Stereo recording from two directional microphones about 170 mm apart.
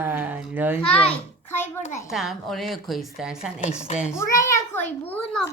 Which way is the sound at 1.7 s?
45° left (ahead or behind).